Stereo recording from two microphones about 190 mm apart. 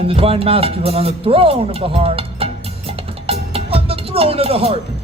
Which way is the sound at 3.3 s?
30° right (ahead or behind).